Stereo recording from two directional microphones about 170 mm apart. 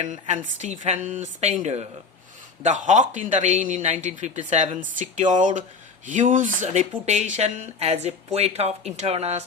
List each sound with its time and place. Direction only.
0.0 s a man's voice: 45° right (ahead or behind)